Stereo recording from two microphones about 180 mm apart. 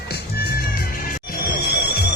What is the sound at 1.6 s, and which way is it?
Music, 65° left (ahead or behind).